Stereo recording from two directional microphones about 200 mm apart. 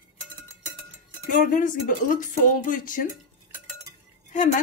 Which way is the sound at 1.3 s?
40° left (ahead or behind).